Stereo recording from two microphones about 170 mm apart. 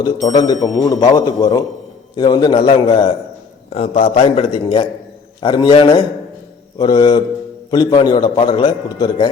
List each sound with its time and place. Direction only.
0.0 s a man's voice: 20° left (ahead or behind)